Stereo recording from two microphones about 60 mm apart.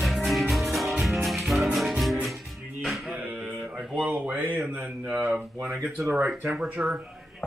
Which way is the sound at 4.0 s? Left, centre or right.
Right.